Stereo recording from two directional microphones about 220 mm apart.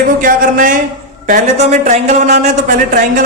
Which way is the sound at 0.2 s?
40° right (ahead or behind).